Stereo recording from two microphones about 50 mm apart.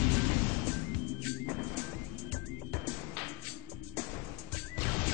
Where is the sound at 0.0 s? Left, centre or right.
Left.